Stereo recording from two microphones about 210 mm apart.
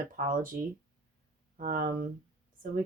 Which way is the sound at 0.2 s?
40° right (ahead or behind).